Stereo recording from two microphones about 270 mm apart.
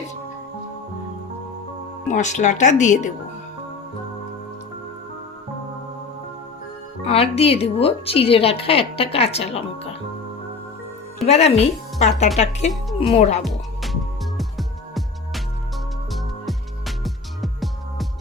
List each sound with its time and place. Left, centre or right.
2.0 s a woman's voice: left
7.0 s a woman's voice: left
11.3 s a woman's voice: left
13.4 s music: centre
16.5 s music: centre